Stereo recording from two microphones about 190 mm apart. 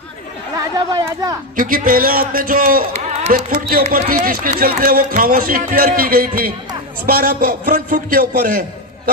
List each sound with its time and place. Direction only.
0.5 s speech: 15° right (ahead or behind)
1.5 s speech: 45° right (ahead or behind)